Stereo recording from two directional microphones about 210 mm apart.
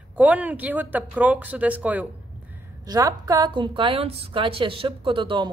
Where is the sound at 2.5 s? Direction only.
20° right (ahead or behind).